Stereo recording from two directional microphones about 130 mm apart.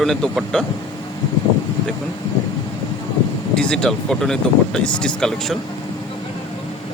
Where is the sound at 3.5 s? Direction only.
5° left (ahead or behind).